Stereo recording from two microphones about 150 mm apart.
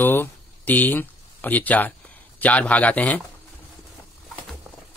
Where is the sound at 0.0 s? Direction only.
15° left (ahead or behind).